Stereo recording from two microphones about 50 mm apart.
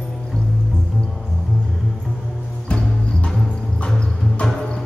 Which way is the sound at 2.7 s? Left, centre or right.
Centre.